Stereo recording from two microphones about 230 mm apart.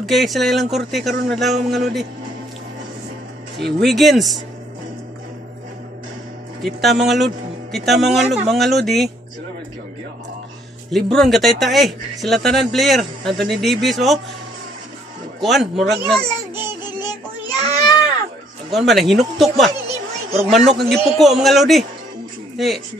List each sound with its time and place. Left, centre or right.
0.0 s speech: centre
3.5 s speech: centre
6.6 s speech: centre
10.9 s speech: centre
15.4 s speech: centre
17.0 s child singing: centre
18.7 s speech: centre